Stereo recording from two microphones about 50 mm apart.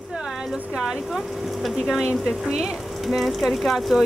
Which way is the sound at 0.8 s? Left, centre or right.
Centre.